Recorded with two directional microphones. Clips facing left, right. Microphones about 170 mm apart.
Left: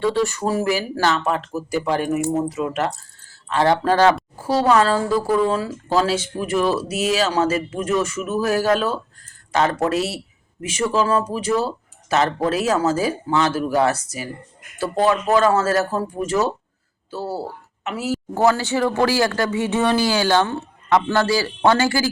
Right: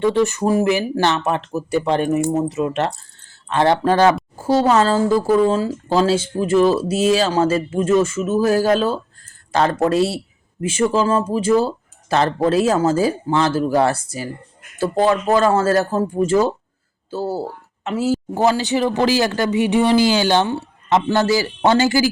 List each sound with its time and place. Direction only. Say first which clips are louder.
0.0 s speech: right 3 dB; 20° right (ahead or behind)
18.3 s speech: left 1 dB; 15° right (ahead or behind)